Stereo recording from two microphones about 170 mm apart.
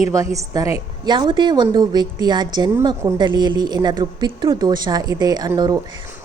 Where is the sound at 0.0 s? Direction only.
20° right (ahead or behind).